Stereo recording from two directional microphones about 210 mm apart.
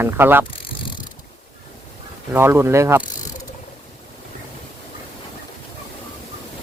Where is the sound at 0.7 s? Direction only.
25° left (ahead or behind).